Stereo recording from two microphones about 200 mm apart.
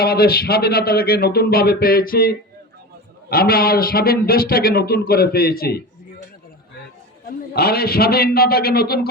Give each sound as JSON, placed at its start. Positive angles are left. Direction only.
{"t": 0.0, "sound": "speech", "side_deg": 50}
{"t": 7.5, "sound": "speech", "side_deg": 50}